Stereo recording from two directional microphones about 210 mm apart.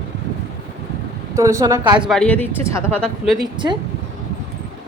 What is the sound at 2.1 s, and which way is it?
Speech, 5° left (ahead or behind).